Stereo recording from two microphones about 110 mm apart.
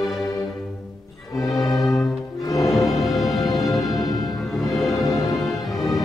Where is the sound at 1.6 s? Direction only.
30° left (ahead or behind).